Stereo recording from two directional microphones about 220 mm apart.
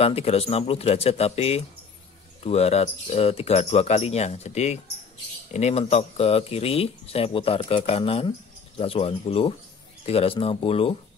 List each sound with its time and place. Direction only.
0.0 s speech: 30° left (ahead or behind)